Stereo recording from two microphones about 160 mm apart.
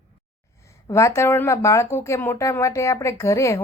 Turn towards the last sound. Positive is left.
turn(degrees=20)  # may be behind; listen again after turning